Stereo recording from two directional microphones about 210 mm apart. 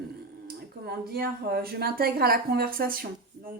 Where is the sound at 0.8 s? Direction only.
45° right (ahead or behind).